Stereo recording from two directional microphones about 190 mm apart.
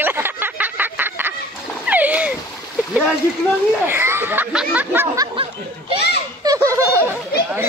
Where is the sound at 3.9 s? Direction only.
10° right (ahead or behind).